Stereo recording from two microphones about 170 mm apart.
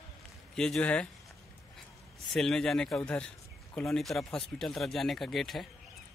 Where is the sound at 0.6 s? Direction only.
5° left (ahead or behind).